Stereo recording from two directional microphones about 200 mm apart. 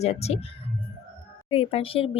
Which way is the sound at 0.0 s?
30° left (ahead or behind).